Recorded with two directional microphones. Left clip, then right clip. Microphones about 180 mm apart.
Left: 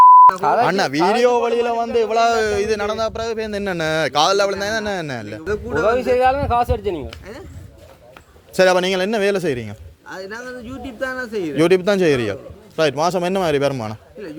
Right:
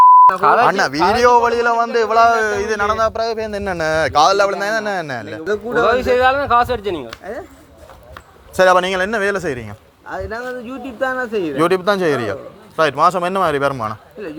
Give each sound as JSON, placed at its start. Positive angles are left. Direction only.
{"t": 0.4, "sound": "speech", "side_deg": 15}
{"t": 0.7, "sound": "a man's voice", "side_deg": 45}
{"t": 1.2, "sound": "a man's voice", "side_deg": 30}
{"t": 5.8, "sound": "speech", "side_deg": 15}
{"t": 8.5, "sound": "a man's voice", "side_deg": 50}
{"t": 11.0, "sound": "a man's voice", "side_deg": 50}